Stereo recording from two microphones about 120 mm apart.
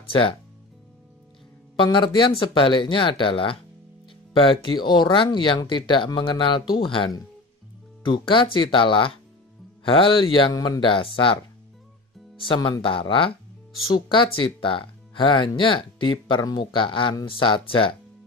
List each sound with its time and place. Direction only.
0.1 s speech: 45° left (ahead or behind)
1.8 s speech: 40° left (ahead or behind)
12.4 s speech: 45° left (ahead or behind)